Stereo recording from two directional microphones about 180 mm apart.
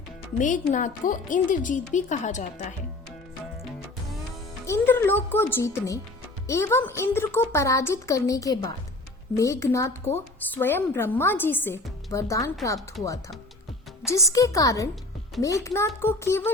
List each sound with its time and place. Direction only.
0.3 s speech: 45° left (ahead or behind)
4.6 s speech: 15° left (ahead or behind)